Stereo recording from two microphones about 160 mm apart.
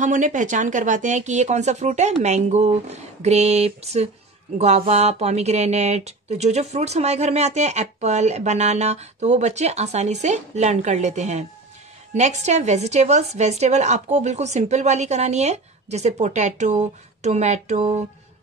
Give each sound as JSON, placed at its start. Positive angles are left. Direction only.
{"t": 0.0, "sound": "speech", "side_deg": -50}